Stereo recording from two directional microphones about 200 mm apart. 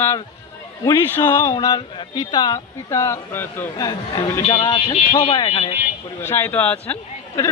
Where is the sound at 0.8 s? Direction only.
20° left (ahead or behind).